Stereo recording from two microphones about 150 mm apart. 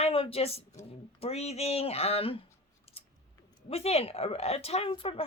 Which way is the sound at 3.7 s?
40° left (ahead or behind).